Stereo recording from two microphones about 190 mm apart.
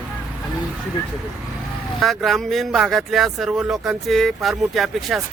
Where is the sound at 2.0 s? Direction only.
Centre (ahead or behind).